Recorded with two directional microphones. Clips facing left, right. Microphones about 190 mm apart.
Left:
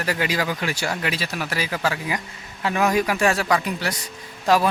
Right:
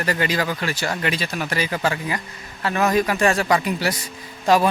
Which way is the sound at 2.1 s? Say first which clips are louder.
Even; 15° left (ahead or behind).